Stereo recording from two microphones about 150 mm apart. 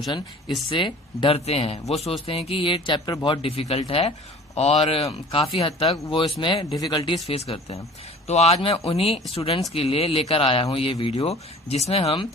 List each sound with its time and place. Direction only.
0.7 s speech: 35° left (ahead or behind)
6.7 s speech: 25° left (ahead or behind)
7.3 s speech: 40° left (ahead or behind)